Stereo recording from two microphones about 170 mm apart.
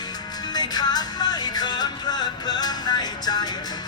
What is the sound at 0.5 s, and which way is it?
Music, 25° left (ahead or behind).